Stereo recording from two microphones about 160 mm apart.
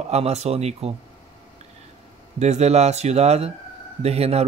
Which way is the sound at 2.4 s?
45° right (ahead or behind).